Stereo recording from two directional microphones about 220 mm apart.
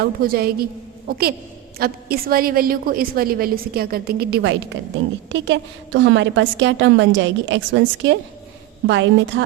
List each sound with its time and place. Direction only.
0.0 s a woman's voice: 45° right (ahead or behind)